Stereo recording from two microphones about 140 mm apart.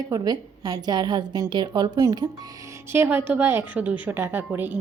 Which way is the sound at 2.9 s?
15° right (ahead or behind).